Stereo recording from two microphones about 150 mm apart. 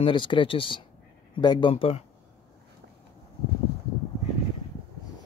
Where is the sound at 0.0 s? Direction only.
35° left (ahead or behind).